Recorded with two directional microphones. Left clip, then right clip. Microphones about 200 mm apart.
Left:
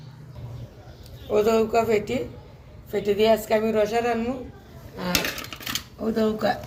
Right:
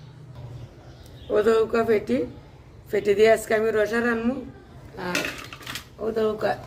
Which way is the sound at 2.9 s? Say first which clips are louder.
Right 2 dB; 55° right (ahead or behind).